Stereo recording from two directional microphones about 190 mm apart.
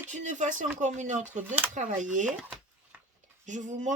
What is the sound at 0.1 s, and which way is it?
Speech, 40° right (ahead or behind).